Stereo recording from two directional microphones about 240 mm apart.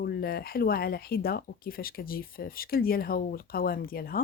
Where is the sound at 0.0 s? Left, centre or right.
Left.